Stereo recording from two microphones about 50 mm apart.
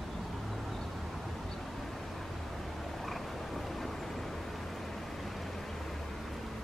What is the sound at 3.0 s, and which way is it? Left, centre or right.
Frog, centre.